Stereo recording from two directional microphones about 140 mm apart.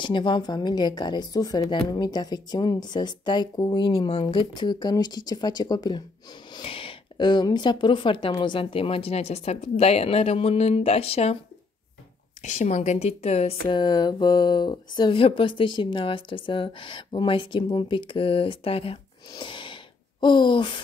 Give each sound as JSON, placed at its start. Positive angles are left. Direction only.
{"t": 0.0, "sound": "speech", "side_deg": 35}
{"t": 6.5, "sound": "speech", "side_deg": 40}
{"t": 12.4, "sound": "speech", "side_deg": 55}